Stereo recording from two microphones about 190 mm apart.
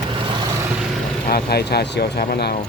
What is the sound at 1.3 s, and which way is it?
Speech, 55° left (ahead or behind).